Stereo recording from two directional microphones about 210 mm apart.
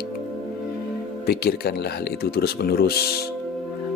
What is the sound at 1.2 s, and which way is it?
Speech, 50° left (ahead or behind).